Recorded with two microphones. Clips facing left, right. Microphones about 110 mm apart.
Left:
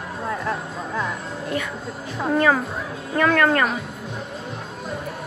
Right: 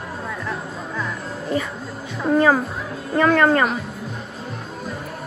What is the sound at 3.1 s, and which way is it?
Speech, 5° right (ahead or behind).